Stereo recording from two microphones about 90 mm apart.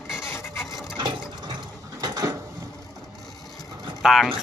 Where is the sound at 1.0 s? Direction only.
55° right (ahead or behind).